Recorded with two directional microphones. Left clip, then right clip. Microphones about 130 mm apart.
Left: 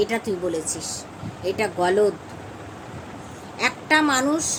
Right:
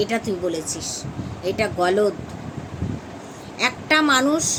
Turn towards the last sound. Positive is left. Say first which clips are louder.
# right 2 dB
turn(degrees=-15)  # may be behind; listen again after turning